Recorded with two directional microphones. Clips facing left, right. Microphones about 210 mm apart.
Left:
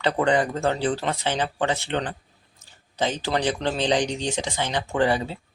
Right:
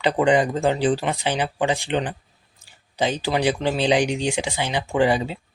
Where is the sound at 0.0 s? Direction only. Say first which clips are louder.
Right 3 dB; 15° right (ahead or behind).